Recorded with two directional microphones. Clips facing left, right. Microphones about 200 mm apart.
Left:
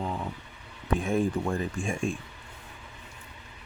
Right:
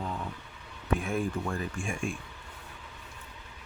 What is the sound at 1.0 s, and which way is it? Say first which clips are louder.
Speech: left 5 dB; 30° left (ahead or behind).